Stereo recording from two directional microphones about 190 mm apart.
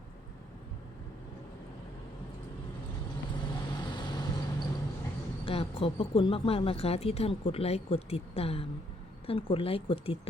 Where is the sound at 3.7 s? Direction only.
25° left (ahead or behind).